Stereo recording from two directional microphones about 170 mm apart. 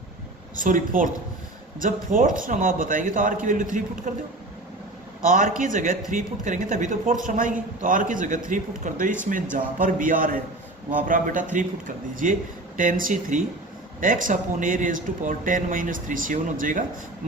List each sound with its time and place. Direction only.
0.6 s speech: 50° right (ahead or behind)
5.2 s speech: 50° right (ahead or behind)